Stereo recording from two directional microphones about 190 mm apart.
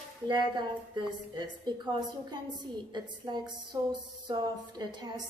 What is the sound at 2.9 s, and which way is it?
A woman's voice, 20° right (ahead or behind).